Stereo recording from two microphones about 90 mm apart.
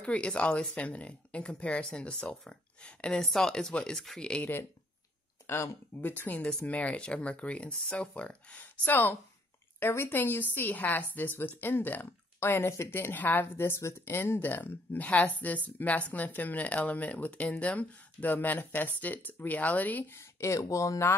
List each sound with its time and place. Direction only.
0.0 s speech: 10° left (ahead or behind)
5.5 s a woman's voice: 30° left (ahead or behind)
20.2 s speech: 35° left (ahead or behind)